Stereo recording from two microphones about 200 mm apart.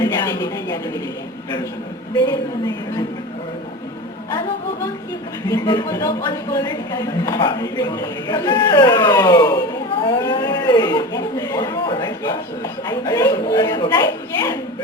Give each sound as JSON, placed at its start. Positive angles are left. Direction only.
{"t": 0.0, "sound": "speech", "side_deg": 20}
{"t": 2.1, "sound": "a woman's voice", "side_deg": 20}
{"t": 5.5, "sound": "speech", "side_deg": 20}